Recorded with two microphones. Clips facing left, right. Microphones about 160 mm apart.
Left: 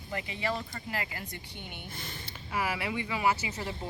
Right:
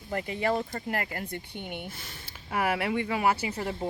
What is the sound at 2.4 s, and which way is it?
Speech, 55° right (ahead or behind).